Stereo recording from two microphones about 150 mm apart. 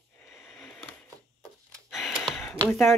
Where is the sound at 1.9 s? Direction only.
Centre (ahead or behind).